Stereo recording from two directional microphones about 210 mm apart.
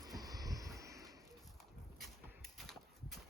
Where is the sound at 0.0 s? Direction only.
15° right (ahead or behind).